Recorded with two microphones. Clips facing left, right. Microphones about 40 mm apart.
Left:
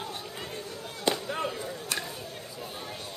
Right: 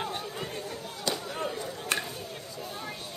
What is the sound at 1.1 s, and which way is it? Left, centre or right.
Fireworks, centre.